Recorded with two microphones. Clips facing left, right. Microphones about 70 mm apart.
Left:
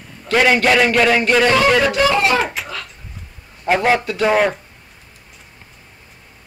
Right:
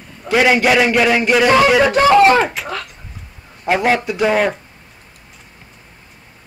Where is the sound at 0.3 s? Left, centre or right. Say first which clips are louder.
Right 1 dB; centre.